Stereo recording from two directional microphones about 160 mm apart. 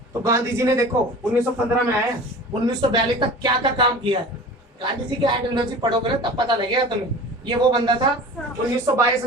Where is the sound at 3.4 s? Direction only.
30° right (ahead or behind).